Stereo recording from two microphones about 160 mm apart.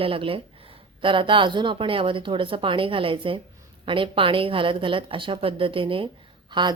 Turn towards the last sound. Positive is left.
turn(degrees=-30)  # may be behind; listen again after turning